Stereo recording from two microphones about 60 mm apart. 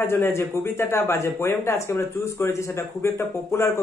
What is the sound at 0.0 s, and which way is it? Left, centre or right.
Speech, left.